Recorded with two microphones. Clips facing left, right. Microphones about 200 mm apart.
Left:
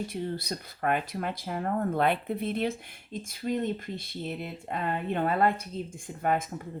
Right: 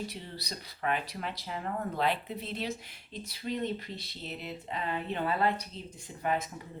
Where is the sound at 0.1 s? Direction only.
50° left (ahead or behind).